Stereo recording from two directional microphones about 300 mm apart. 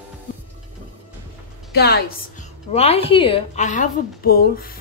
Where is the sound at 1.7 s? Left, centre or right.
Left.